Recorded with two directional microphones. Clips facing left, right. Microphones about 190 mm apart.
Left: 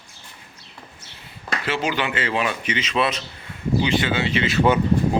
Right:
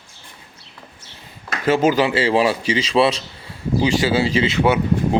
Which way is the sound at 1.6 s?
45° right (ahead or behind).